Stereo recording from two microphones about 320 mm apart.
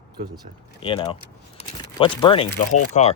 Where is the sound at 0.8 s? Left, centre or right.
Centre.